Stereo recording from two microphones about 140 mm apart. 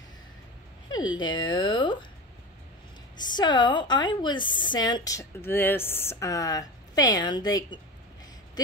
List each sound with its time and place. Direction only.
0.9 s a woman's voice: 30° left (ahead or behind)
3.2 s a woman's voice: 30° left (ahead or behind)